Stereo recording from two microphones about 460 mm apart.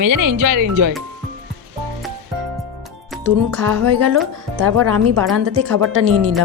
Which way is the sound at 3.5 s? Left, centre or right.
Right.